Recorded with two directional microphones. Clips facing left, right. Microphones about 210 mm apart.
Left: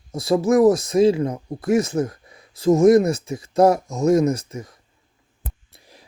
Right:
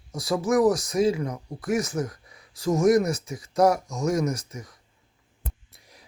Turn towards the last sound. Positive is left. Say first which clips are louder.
# left 5 dB
turn(degrees=30)  # may be behind; listen again after turning